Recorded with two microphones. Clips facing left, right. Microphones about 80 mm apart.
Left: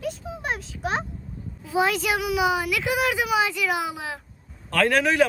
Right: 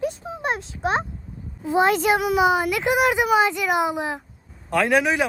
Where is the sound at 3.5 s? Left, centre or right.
Right.